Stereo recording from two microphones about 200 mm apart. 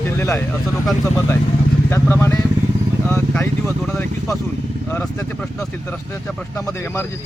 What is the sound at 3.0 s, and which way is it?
Speech, 5° left (ahead or behind).